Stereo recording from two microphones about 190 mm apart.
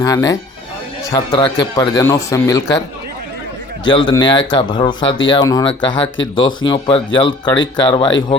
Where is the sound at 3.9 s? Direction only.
25° left (ahead or behind).